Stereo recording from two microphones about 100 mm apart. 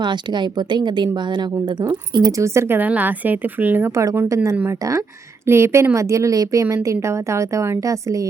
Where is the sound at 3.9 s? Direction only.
30° right (ahead or behind).